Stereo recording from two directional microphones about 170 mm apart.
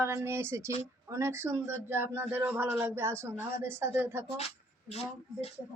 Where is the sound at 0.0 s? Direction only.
15° right (ahead or behind).